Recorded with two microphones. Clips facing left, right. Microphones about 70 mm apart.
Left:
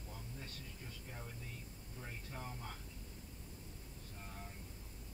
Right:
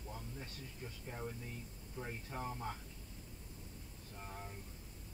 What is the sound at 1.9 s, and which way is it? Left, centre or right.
Speech, right.